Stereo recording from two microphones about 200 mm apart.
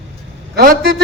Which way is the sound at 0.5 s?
50° right (ahead or behind).